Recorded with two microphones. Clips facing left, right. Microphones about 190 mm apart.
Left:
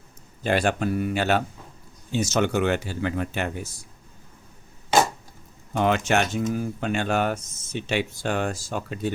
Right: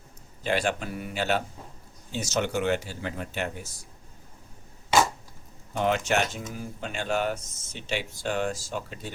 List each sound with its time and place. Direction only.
0.4 s speech: 50° left (ahead or behind); by 3.5 s 70° left (ahead or behind)
5.7 s speech: 75° left (ahead or behind); by 9.1 s 55° left (ahead or behind)